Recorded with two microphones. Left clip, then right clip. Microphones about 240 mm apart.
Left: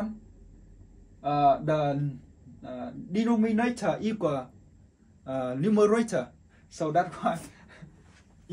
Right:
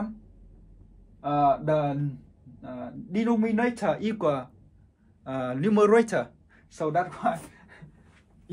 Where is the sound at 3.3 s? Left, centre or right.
Centre.